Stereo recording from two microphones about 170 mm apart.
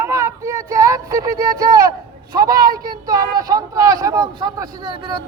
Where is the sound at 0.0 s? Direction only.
15° right (ahead or behind).